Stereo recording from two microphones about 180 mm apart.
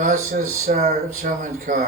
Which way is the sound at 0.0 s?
45° right (ahead or behind).